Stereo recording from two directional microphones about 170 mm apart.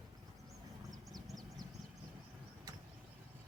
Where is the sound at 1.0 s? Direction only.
Centre (ahead or behind).